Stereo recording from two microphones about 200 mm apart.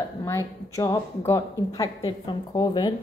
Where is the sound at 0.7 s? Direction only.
15° left (ahead or behind).